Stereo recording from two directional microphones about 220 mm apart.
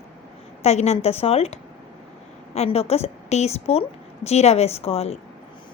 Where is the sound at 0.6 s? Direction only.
30° left (ahead or behind).